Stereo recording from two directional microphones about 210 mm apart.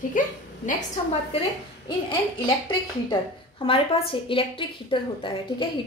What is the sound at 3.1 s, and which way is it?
A woman's voice, 25° left (ahead or behind).